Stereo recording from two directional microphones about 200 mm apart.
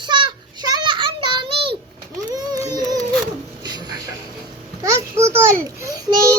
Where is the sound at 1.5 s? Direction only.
25° right (ahead or behind).